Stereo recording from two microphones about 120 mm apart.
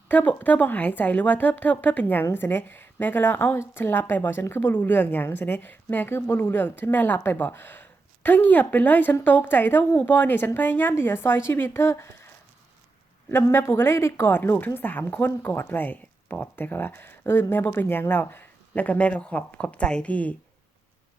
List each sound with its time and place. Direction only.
0.1 s a woman's voice: 15° left (ahead or behind)
13.3 s a woman's voice: 20° left (ahead or behind)